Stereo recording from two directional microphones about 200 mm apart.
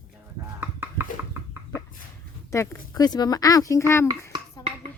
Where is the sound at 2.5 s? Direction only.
15° left (ahead or behind).